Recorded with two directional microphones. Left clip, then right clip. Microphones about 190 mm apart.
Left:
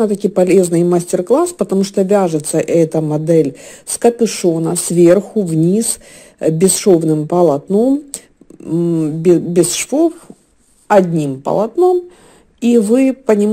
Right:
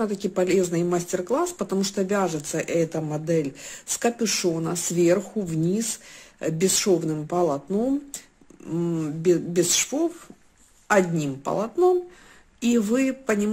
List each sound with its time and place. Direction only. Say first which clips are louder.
0.0 s speech: left 11 dB; 35° left (ahead or behind)
10.9 s speech: left 10 dB; 30° left (ahead or behind)